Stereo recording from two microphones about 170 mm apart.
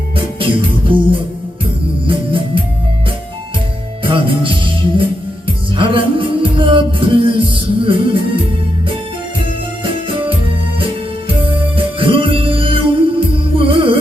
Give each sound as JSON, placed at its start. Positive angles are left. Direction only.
{"t": 0.3, "sound": "music", "side_deg": -30}
{"t": 4.0, "sound": "music", "side_deg": -30}
{"t": 11.4, "sound": "music", "side_deg": -30}